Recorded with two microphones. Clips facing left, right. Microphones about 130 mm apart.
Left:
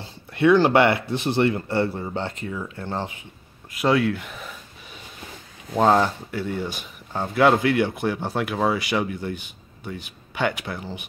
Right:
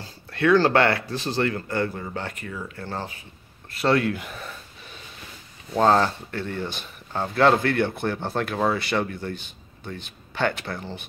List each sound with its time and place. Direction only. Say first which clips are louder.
0.0 s speech: left 4 dB; 20° left (ahead or behind)
4.0 s speech: left 2 dB; centre (ahead or behind)
5.8 s speech: left 1 dB; 10° left (ahead or behind)